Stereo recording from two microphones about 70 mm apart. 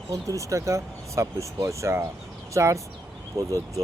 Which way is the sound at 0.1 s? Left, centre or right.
Right.